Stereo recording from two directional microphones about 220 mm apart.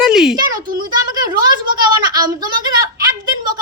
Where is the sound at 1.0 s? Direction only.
20° right (ahead or behind).